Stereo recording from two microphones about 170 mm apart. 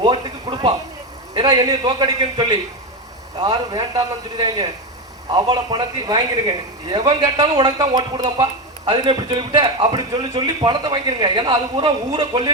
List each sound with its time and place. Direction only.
0.0 s a man's voice: 25° right (ahead or behind)